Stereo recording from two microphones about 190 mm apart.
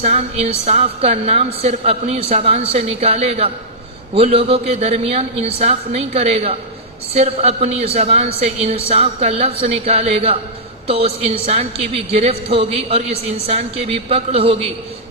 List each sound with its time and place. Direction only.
0.0 s a woman's voice: 35° right (ahead or behind)